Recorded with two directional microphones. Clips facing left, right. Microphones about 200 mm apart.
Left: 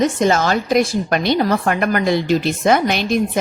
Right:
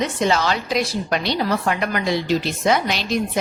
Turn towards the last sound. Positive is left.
turn(degrees=55)  # may be behind; listen again after turning